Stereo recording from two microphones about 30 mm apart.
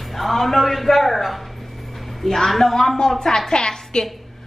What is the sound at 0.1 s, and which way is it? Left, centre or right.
A woman's voice, centre.